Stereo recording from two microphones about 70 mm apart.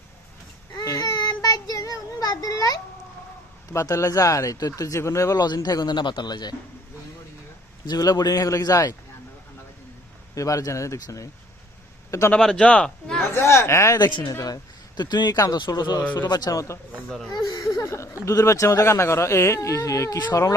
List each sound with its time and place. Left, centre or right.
0.8 s child singing: left
3.8 s speech: left
5.6 s speech: left
7.9 s a man's voice: left
10.3 s speech: left
12.3 s a man's voice: centre
13.3 s speech: left
13.9 s speech: left
14.3 s a man's voice: left
19.5 s speech: left